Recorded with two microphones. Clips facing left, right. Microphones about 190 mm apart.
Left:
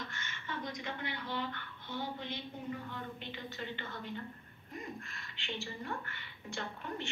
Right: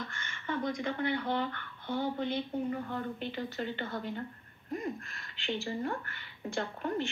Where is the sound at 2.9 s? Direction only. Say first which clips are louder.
Right 7 dB; 45° right (ahead or behind).